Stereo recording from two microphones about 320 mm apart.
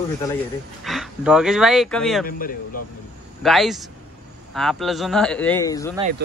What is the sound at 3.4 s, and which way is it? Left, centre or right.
Speech, centre.